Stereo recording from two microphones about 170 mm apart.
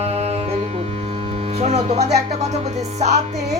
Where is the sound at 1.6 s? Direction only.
40° right (ahead or behind).